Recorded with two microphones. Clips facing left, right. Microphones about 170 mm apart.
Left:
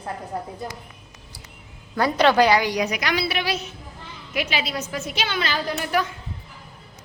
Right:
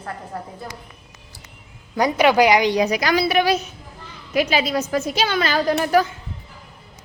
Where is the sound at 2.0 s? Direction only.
15° right (ahead or behind); by 6.1 s 40° right (ahead or behind).